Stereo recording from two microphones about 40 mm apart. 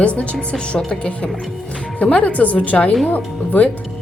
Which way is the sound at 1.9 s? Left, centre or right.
Left.